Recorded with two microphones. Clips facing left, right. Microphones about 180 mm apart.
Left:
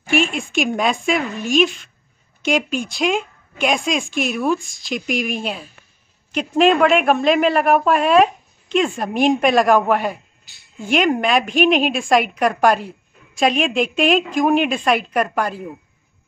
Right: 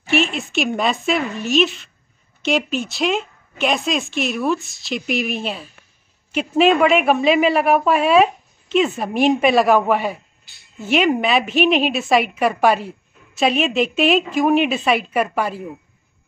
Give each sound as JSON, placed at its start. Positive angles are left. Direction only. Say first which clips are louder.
{"t": 0.1, "sound": "a woman's voice", "louder": "even", "side_deg": 50}
{"t": 0.6, "sound": "a woman's voice", "louder": "left 1 dB", "side_deg": 0}